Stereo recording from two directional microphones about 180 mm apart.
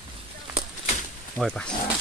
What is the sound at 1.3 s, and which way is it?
Speech, 5° left (ahead or behind).